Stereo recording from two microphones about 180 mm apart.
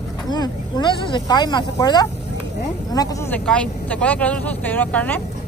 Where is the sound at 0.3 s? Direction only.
25° left (ahead or behind).